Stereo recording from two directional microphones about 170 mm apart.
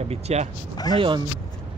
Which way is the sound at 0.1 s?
40° right (ahead or behind).